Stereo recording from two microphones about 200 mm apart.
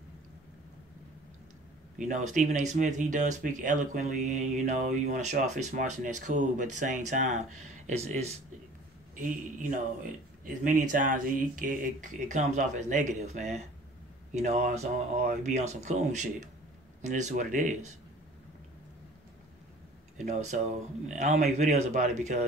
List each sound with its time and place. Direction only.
2.0 s speech: 35° right (ahead or behind)
20.2 s speech: 35° right (ahead or behind)